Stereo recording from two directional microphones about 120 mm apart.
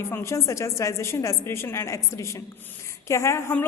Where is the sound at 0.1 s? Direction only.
20° left (ahead or behind).